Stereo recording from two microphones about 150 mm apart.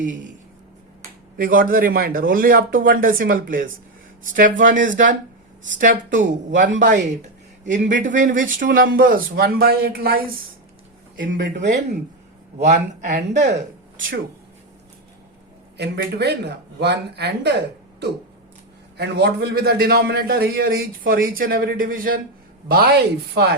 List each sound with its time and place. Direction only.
0.0 s speech: 60° right (ahead or behind)
1.4 s speech: 70° right (ahead or behind); by 10.4 s 85° right
11.2 s speech: 65° right (ahead or behind)
12.6 s speech: 55° right (ahead or behind)
15.8 s a man's voice: 90° right
18.9 s a man's voice: 90° right; by 22.2 s 70° right (ahead or behind)
22.7 s a man's voice: 90° right